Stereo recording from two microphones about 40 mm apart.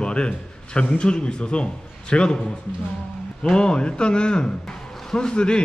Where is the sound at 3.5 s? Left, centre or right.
Left.